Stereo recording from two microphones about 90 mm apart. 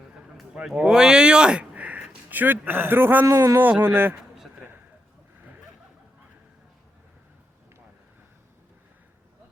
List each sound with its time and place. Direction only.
0.3 s speech: 5° right (ahead or behind); by 3.2 s 20° right (ahead or behind)
3.2 s speech: 35° right (ahead or behind)
3.6 s speech: 15° right (ahead or behind)